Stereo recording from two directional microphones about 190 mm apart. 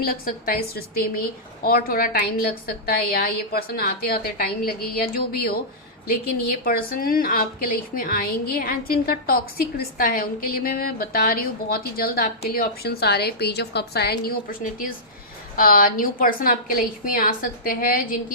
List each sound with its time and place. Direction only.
0.0 s a woman's voice: 50° left (ahead or behind)